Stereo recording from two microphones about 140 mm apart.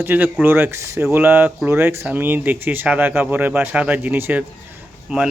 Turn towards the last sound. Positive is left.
turn(degrees=-10)  # may be behind; listen again after turning